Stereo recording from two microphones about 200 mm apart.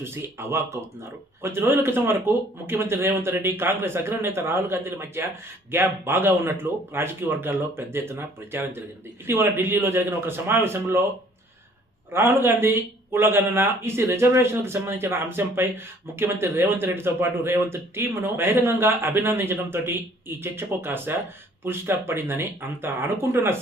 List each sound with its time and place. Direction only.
0.0 s a man's voice: 10° right (ahead or behind)
12.1 s a man's voice: 10° right (ahead or behind)